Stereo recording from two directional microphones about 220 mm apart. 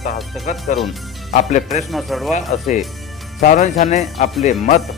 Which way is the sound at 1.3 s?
35° left (ahead or behind).